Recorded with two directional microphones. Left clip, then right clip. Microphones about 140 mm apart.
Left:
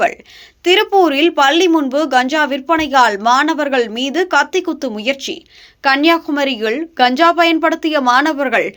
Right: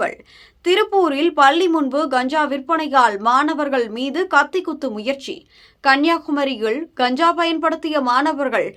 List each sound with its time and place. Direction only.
0.6 s a woman's voice: 15° left (ahead or behind)